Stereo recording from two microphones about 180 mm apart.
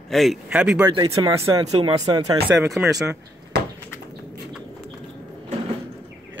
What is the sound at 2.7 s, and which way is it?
Speech, 5° right (ahead or behind).